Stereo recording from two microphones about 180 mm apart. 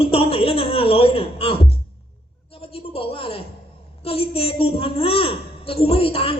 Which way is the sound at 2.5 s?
30° left (ahead or behind).